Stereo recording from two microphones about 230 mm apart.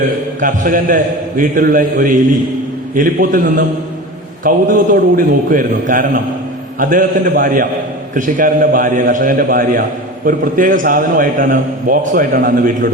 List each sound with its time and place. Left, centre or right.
0.3 s a man's voice: right